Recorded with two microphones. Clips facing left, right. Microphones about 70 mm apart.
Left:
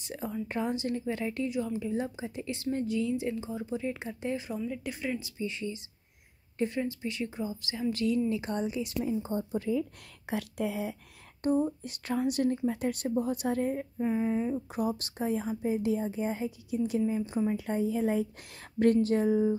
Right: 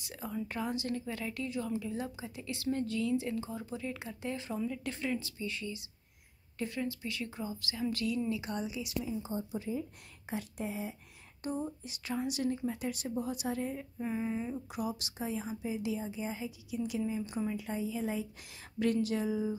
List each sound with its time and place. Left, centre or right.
0.0 s a woman's voice: left
9.6 s speech: left
11.4 s a woman's voice: left
13.9 s speech: left
14.7 s a woman's voice: left
17.6 s a woman's voice: left